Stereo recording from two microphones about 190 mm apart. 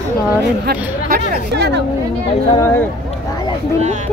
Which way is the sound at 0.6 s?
55° right (ahead or behind).